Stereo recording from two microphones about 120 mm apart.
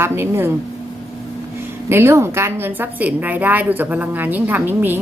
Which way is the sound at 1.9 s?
20° right (ahead or behind).